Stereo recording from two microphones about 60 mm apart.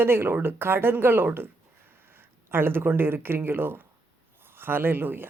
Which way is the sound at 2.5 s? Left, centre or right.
Right.